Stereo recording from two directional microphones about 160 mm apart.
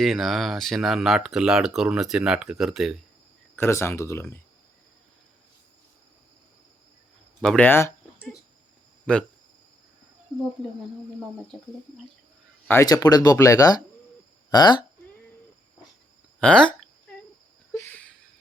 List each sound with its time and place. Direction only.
0.0 s speech: centre (ahead or behind)
3.5 s speech: 15° left (ahead or behind)
7.4 s speech: 10° left (ahead or behind)
12.6 s speech: 20° left (ahead or behind)
16.4 s speech: 5° left (ahead or behind)
17.7 s a sound: 10° left (ahead or behind)